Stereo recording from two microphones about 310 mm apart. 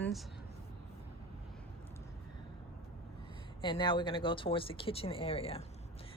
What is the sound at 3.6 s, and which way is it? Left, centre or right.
Speech, centre.